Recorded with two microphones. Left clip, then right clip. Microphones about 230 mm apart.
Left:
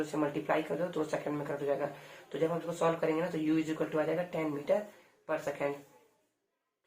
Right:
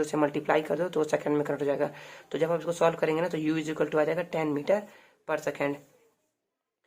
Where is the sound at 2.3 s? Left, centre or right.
Right.